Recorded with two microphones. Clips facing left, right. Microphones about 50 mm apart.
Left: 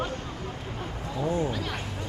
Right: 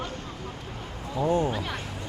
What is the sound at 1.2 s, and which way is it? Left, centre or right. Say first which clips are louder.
Speech: right 3 dB; right.